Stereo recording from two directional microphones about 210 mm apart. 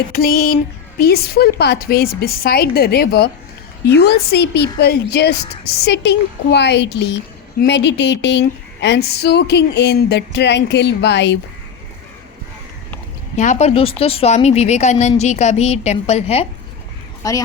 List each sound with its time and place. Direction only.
0.1 s a woman's voice: 45° left (ahead or behind)
13.3 s a woman's voice: 35° left (ahead or behind)
17.2 s a woman's voice: 15° left (ahead or behind)